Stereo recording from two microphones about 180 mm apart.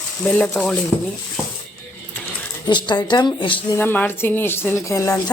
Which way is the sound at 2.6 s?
25° left (ahead or behind).